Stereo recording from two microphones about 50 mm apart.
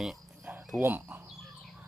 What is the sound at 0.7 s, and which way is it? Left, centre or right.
Speech, right.